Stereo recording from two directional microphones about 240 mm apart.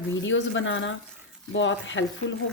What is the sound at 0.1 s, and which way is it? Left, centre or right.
Speech, left.